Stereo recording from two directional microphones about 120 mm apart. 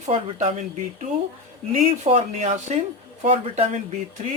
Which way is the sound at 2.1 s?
60° right (ahead or behind).